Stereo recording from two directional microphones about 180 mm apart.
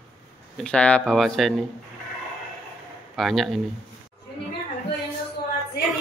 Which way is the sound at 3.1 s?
Centre (ahead or behind).